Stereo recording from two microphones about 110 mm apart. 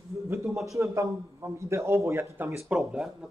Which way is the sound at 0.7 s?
25° right (ahead or behind).